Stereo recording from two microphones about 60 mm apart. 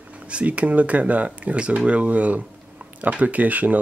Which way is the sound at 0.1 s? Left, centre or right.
Right.